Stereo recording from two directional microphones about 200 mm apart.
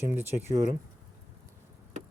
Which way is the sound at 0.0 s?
10° right (ahead or behind).